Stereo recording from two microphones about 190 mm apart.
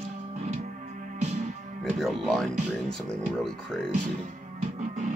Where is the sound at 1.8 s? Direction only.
Centre (ahead or behind).